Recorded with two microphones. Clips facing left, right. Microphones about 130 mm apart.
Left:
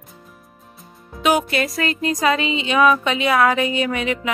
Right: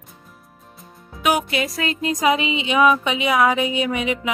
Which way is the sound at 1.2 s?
10° right (ahead or behind).